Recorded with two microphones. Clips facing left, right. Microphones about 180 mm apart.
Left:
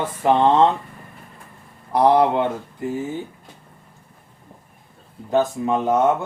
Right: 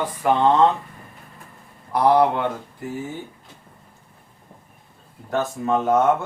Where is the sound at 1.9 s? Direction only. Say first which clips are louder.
Left 1 dB; 20° left (ahead or behind).